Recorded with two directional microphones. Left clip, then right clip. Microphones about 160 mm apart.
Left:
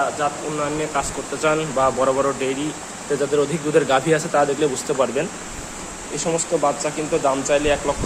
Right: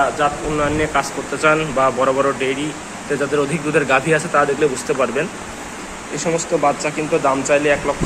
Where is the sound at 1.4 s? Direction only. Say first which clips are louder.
Right 4 dB; 20° left (ahead or behind).